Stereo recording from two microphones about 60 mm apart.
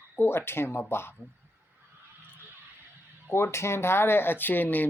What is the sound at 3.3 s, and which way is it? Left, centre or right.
Speech, left.